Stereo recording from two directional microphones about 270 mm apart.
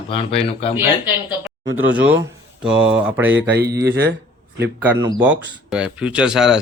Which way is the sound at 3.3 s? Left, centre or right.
Right.